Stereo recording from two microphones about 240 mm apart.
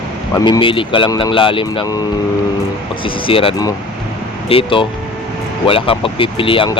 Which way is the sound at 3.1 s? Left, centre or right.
Left.